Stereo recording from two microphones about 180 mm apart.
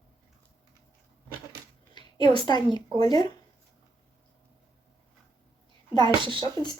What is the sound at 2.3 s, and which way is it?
Speech, 25° left (ahead or behind).